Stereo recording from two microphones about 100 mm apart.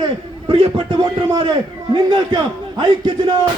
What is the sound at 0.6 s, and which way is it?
A man's voice, 45° right (ahead or behind).